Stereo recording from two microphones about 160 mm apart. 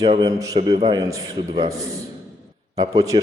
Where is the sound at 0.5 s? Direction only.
35° right (ahead or behind).